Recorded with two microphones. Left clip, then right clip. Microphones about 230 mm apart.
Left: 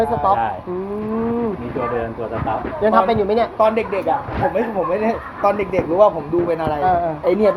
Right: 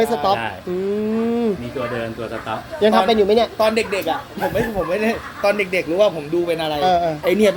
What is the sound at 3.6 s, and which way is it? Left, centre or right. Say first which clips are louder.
Speech: left 1 dB; right.